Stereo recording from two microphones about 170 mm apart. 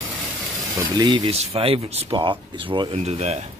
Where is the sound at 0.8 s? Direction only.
25° right (ahead or behind).